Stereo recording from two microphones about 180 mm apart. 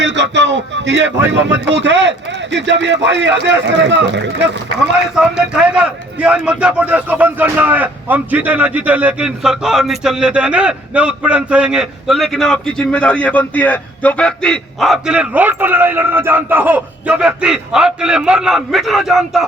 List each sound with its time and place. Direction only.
0.0 s speech: 80° right
5.1 s speech: 5° right (ahead or behind)